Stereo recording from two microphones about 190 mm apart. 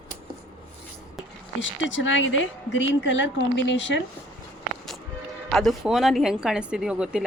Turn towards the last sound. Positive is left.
turn(degrees=-5)  # may be behind; listen again after turning